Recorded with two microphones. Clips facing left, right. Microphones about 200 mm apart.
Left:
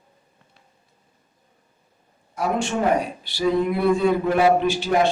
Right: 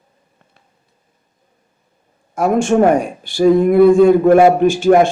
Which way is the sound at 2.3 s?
50° right (ahead or behind).